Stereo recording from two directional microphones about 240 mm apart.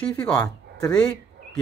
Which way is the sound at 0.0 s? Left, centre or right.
Centre.